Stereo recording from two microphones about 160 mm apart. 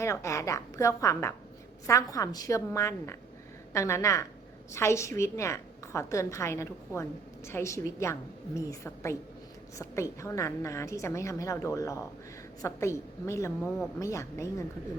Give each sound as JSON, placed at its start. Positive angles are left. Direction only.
{"t": 0.0, "sound": "a woman's voice", "side_deg": 20}